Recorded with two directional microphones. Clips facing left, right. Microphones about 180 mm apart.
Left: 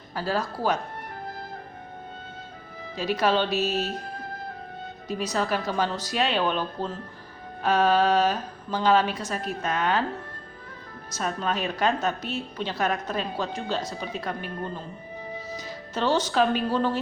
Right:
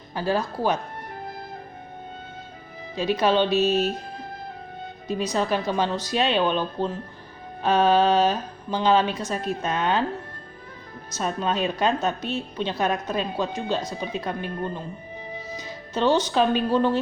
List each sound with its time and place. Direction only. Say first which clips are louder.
0.1 s speech: right 3 dB; 20° right (ahead or behind)
2.9 s a woman's voice: right 3 dB; 20° right (ahead or behind)
5.0 s a woman's voice: right 3 dB; 20° right (ahead or behind)
11.3 s a woman's voice: right 3 dB; 20° right (ahead or behind)